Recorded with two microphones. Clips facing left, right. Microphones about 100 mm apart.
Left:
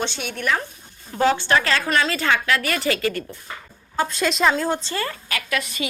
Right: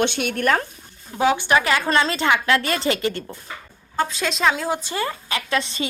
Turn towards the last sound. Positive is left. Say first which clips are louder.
# right 2 dB
turn(degrees=-30)  # may be behind; listen again after turning